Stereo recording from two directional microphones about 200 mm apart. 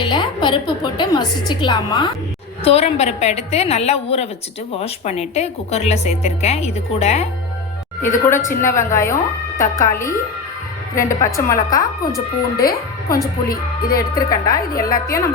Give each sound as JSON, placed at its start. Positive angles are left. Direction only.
{"t": 0.0, "sound": "a woman's voice", "side_deg": 20}
{"t": 8.0, "sound": "speech", "side_deg": 15}
{"t": 14.2, "sound": "a woman's voice", "side_deg": 20}
{"t": 14.7, "sound": "a woman's voice", "side_deg": 45}